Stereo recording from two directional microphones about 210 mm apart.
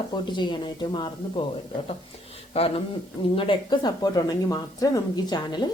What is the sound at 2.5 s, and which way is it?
A woman's voice, 30° left (ahead or behind).